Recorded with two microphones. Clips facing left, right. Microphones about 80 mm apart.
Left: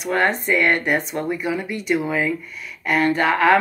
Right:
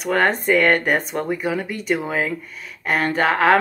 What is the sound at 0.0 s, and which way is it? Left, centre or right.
Speech, right.